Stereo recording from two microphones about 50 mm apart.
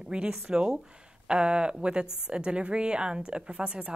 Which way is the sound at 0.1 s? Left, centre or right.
Centre.